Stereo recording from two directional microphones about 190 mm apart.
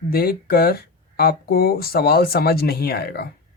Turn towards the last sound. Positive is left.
turn(degrees=55)  # may be behind; listen again after turning